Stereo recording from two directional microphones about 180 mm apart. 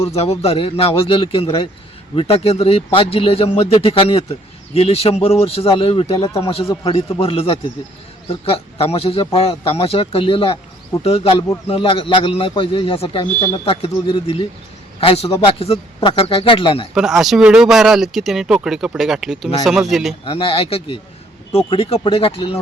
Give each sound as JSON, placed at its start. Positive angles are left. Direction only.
{"t": 0.2, "sound": "a man's voice", "side_deg": 35}
{"t": 16.9, "sound": "speech", "side_deg": 0}
{"t": 20.2, "sound": "speech", "side_deg": 30}